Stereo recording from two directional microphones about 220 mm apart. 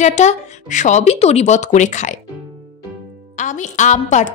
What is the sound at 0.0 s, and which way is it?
A woman's voice, 30° left (ahead or behind).